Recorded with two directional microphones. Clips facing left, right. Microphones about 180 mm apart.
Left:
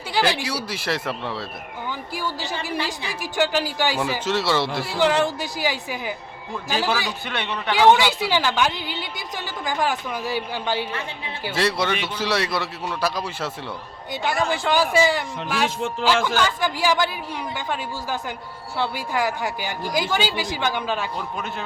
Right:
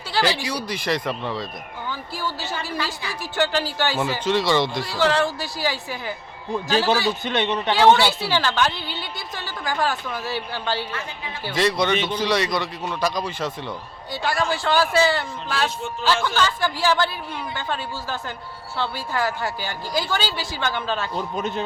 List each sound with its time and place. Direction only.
0.1 s a woman's voice: 15° left (ahead or behind)
7.1 s a man's voice: 20° right (ahead or behind)
7.8 s a woman's voice: 15° left (ahead or behind)
14.1 s a woman's voice: 20° left (ahead or behind)
21.3 s a man's voice: 20° right (ahead or behind)